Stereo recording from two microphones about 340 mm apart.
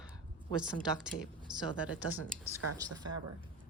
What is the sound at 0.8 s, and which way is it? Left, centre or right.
A woman's voice, centre.